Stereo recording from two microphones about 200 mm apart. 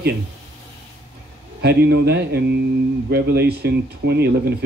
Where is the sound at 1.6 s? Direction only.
55° right (ahead or behind).